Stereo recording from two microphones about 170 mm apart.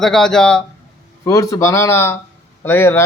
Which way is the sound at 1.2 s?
20° left (ahead or behind).